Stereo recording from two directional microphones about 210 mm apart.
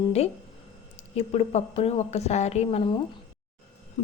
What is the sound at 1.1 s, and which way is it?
A woman's voice, 30° left (ahead or behind).